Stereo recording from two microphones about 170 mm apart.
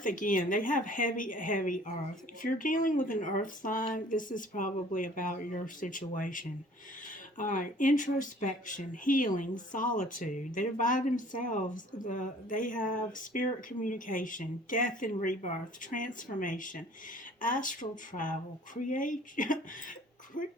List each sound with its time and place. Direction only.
0.0 s speech: 50° left (ahead or behind)